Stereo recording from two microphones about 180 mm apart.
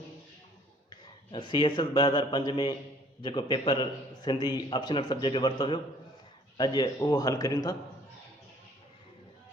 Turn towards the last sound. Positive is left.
turn(degrees=20)  # may be behind; listen again after turning